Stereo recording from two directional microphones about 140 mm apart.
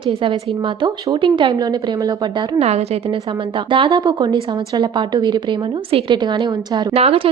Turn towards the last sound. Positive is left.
turn(degrees=-45)  # may be behind; listen again after turning